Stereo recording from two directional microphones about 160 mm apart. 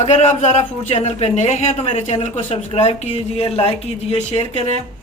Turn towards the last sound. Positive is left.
turn(degrees=40)  # may be behind; listen again after turning